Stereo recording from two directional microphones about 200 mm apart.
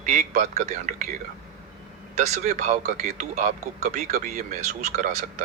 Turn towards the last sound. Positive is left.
turn(degrees=-35)  # may be behind; listen again after turning